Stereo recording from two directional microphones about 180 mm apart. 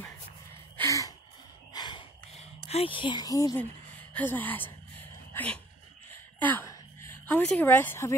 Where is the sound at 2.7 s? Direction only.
30° left (ahead or behind).